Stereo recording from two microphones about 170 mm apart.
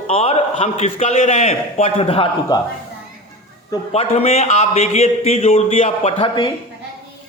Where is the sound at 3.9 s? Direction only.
35° left (ahead or behind).